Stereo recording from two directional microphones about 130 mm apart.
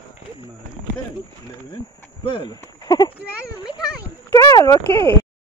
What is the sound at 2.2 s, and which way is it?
Speech, 35° left (ahead or behind).